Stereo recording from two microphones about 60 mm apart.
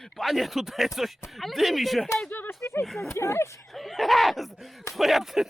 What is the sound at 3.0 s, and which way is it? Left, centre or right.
Speech, left.